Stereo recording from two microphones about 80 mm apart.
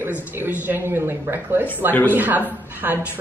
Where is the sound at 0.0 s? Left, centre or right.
Right.